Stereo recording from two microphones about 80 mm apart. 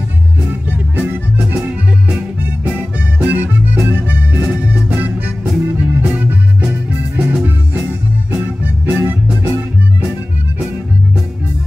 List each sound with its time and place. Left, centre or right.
0.5 s music: right
2.6 s accordion: centre
5.7 s music: centre